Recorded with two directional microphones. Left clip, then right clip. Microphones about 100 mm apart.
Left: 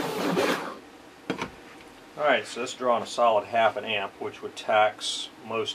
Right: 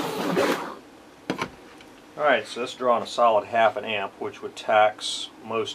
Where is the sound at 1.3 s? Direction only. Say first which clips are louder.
Right 3 dB; 25° right (ahead or behind).